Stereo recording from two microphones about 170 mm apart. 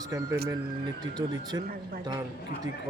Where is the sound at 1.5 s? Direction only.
20° right (ahead or behind).